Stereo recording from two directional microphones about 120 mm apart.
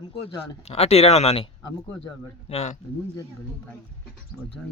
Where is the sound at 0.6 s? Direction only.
60° left (ahead or behind).